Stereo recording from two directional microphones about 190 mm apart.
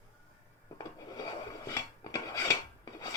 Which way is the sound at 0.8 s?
20° left (ahead or behind).